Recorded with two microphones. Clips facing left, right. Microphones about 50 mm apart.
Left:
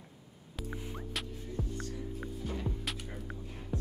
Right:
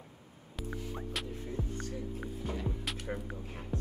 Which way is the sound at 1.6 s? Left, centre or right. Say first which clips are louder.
Left 2 dB; right.